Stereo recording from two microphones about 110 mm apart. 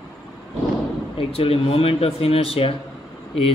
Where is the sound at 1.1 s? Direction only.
60° left (ahead or behind).